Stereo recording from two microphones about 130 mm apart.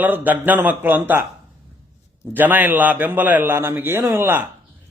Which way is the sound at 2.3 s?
15° right (ahead or behind).